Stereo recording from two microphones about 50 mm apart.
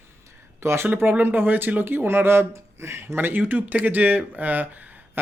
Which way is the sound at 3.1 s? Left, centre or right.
Right.